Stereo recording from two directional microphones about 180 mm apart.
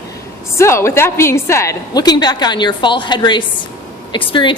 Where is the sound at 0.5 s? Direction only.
15° left (ahead or behind).